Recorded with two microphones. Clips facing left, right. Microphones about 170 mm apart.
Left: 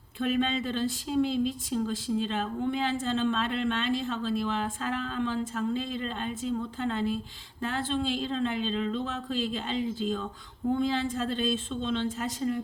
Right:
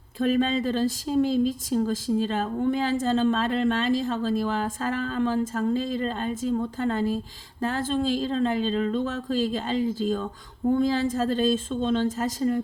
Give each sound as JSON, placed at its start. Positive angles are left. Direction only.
{"t": 0.2, "sound": "speech", "side_deg": -40}